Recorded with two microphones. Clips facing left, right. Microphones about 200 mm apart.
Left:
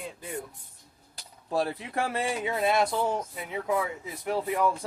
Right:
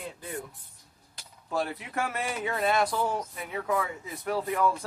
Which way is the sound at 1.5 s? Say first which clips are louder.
Left 2 dB; 35° left (ahead or behind).